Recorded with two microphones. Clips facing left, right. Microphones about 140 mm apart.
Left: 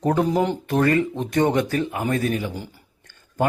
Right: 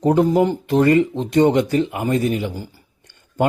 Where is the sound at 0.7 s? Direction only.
20° right (ahead or behind).